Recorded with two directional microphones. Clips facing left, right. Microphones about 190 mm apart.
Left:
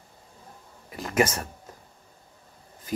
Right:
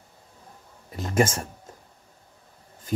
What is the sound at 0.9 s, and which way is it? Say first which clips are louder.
Speech: right 1 dB; 25° right (ahead or behind).